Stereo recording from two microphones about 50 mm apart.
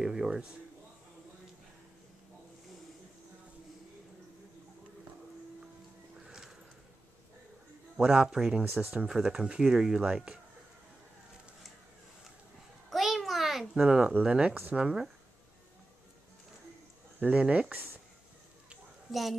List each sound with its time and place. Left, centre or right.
0.0 s a sound: centre
6.2 s music: centre
8.0 s speech: centre
8.6 s speech: right
9.0 s speech: centre
12.9 s a sound: centre
13.8 s speech: centre
17.2 s speech: right
19.1 s a child's voice: centre